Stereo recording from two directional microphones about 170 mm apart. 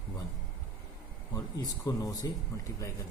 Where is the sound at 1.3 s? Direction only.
20° left (ahead or behind).